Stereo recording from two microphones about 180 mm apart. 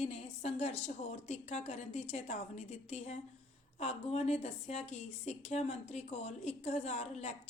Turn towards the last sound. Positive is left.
turn(degrees=40)  # may be behind; listen again after turning